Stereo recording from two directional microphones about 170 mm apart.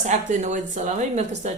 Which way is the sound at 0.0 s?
45° right (ahead or behind).